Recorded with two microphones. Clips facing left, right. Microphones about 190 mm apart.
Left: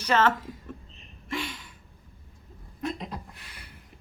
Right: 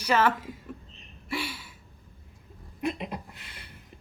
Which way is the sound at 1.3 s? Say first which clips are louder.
Even; 5° right (ahead or behind).